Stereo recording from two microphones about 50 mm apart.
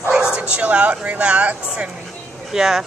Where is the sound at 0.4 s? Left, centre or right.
Right.